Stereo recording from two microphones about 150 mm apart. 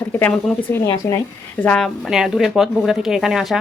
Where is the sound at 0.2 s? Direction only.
10° left (ahead or behind).